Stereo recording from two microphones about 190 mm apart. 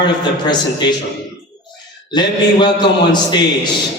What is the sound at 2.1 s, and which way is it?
A man's voice, 25° left (ahead or behind).